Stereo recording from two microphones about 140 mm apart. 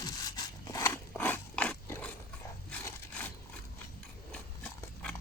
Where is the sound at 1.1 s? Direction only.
10° left (ahead or behind).